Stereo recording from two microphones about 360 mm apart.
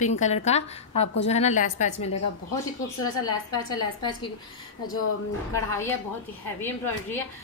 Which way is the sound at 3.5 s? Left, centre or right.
Centre.